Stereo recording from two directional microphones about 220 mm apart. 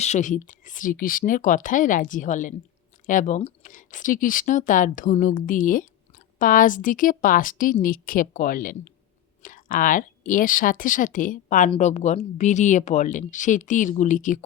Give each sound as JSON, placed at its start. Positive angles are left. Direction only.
{"t": 0.0, "sound": "speech", "side_deg": 30}